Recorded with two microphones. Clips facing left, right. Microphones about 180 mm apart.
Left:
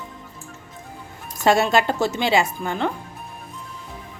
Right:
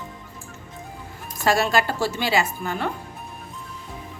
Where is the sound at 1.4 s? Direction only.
25° left (ahead or behind).